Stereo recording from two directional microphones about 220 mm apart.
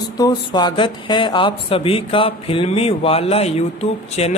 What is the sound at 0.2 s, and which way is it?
Speech, 20° left (ahead or behind).